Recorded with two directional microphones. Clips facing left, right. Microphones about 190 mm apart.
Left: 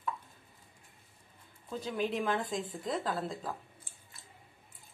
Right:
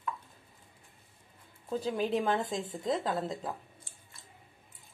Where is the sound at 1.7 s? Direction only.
35° right (ahead or behind).